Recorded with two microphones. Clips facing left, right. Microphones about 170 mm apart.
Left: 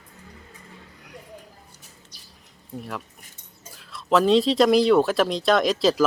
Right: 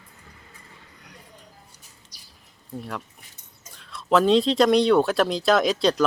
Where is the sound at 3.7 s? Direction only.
5° left (ahead or behind).